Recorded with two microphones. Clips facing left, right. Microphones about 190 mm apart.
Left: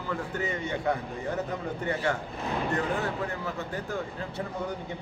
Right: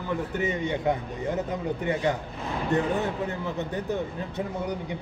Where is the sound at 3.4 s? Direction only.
20° right (ahead or behind).